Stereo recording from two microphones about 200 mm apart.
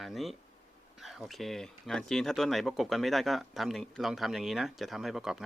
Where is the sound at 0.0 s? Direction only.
Centre (ahead or behind).